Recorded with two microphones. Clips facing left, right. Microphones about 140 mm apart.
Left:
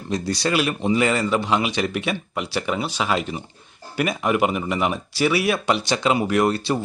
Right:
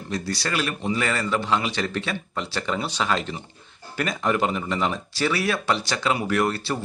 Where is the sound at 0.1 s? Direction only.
20° left (ahead or behind).